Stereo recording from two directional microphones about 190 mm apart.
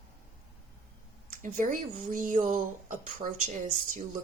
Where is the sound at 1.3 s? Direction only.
40° right (ahead or behind).